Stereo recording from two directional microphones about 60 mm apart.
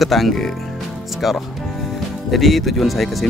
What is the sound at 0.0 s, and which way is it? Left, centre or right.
Speech, centre.